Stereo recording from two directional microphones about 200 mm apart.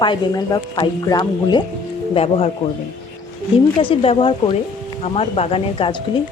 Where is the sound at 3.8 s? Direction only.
25° left (ahead or behind).